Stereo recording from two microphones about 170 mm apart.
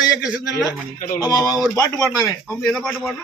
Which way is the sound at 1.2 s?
20° left (ahead or behind).